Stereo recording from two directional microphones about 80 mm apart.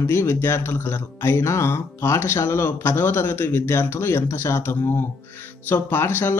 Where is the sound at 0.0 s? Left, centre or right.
Left.